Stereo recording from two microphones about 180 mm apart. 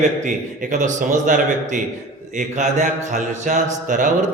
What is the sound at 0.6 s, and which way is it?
A man's voice, 45° right (ahead or behind).